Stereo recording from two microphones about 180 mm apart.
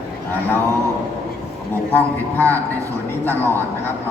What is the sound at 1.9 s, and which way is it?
A man's voice, 10° left (ahead or behind).